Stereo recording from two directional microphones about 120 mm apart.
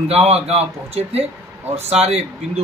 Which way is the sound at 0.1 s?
60° right (ahead or behind).